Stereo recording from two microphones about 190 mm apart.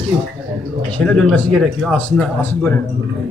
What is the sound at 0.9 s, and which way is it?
Speech, 5° left (ahead or behind).